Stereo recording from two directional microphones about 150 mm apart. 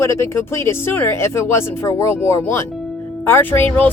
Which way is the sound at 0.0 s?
20° left (ahead or behind).